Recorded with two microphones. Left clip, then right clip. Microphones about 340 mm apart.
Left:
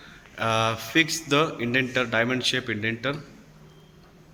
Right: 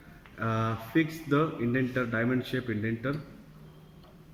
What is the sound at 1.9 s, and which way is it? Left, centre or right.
Speech, centre.